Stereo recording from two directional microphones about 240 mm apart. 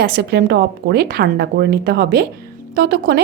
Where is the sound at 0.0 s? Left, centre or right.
Right.